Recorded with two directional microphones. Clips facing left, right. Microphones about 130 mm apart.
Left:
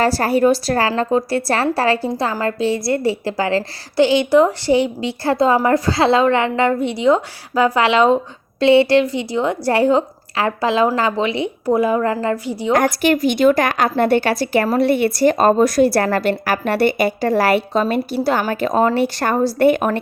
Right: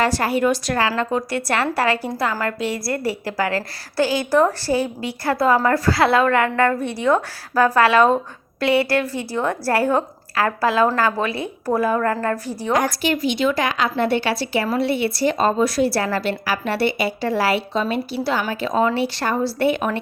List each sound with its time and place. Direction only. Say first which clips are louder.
0.0 s a woman's voice: left 4 dB; 35° left (ahead or behind); by 12.7 s 15° left (ahead or behind)
12.7 s speech: left 5 dB; 55° left (ahead or behind)